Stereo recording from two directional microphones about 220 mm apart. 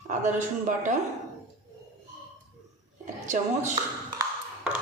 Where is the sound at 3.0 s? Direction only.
35° right (ahead or behind).